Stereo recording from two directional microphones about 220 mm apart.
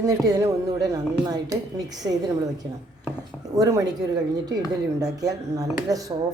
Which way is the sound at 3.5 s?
15° right (ahead or behind).